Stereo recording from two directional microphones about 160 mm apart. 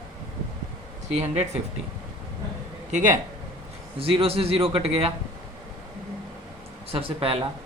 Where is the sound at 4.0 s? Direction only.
35° right (ahead or behind).